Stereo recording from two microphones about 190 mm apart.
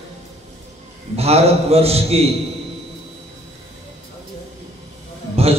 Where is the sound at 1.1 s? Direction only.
35° right (ahead or behind).